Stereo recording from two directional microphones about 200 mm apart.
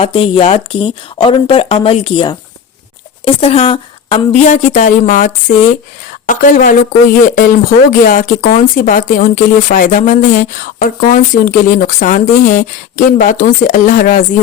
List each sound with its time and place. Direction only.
0.0 s a woman's voice: 25° left (ahead or behind); by 14.3 s 45° left (ahead or behind)